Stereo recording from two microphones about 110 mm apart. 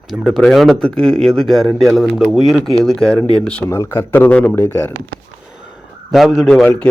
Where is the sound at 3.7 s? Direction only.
25° left (ahead or behind).